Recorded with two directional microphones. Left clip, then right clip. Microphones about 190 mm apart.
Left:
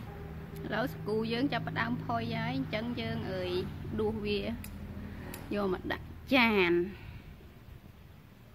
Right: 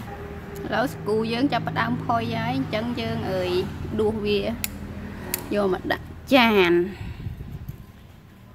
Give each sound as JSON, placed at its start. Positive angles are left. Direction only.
{"t": 0.7, "sound": "speech", "side_deg": 0}